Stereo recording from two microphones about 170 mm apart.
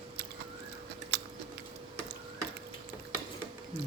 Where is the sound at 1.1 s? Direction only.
80° right.